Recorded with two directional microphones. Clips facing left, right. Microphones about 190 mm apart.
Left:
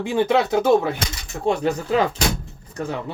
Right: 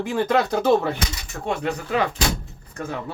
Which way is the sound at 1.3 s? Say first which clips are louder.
Left 9 dB; 15° left (ahead or behind).